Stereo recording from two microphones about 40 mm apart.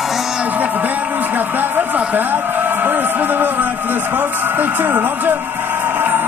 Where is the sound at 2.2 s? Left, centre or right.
Right.